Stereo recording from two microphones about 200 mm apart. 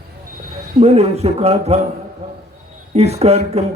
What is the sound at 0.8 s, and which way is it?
Speech, 30° right (ahead or behind).